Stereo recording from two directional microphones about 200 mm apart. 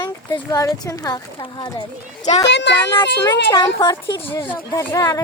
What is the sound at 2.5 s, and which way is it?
Speech, 60° left (ahead or behind).